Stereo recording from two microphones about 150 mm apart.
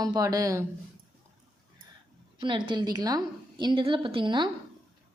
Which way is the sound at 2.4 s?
35° right (ahead or behind).